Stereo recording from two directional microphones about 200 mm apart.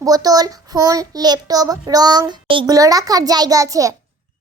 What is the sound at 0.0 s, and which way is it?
A child's voice, 20° right (ahead or behind).